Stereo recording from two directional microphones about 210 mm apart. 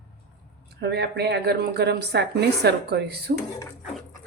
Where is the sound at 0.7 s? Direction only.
50° right (ahead or behind).